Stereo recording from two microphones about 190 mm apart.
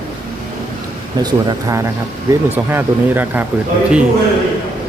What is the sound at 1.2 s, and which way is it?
Speech, 20° right (ahead or behind).